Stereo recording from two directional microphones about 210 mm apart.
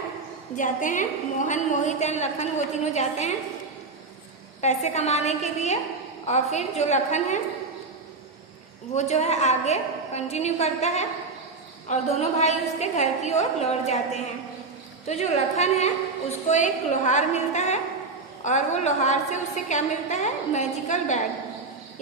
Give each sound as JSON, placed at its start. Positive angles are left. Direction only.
{"t": 0.5, "sound": "a woman's voice", "side_deg": 40}
{"t": 4.6, "sound": "a woman's voice", "side_deg": 35}
{"t": 9.0, "sound": "a woman's voice", "side_deg": 30}